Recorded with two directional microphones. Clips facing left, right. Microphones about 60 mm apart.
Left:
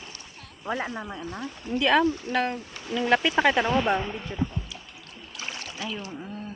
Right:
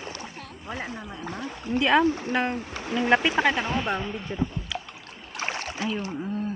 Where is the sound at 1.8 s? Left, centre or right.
Centre.